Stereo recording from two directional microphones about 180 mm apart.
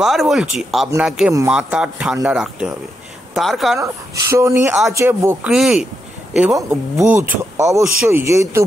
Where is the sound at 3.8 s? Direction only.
15° right (ahead or behind).